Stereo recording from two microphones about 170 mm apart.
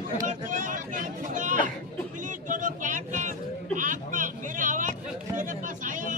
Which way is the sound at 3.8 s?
50° right (ahead or behind).